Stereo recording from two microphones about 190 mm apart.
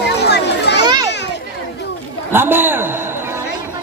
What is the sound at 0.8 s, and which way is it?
Children playing, 20° right (ahead or behind).